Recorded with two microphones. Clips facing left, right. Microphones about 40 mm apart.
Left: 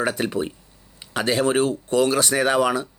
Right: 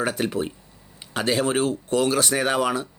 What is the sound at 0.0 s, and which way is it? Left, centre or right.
Speech, left.